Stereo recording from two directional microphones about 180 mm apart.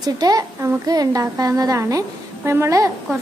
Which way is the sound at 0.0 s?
20° right (ahead or behind).